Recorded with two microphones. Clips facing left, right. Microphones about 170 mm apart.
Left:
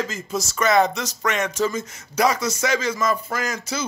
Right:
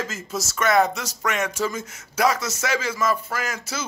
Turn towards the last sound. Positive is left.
turn(degrees=-5)  # may be behind; listen again after turning